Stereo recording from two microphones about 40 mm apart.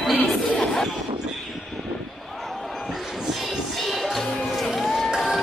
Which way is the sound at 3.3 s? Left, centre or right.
Centre.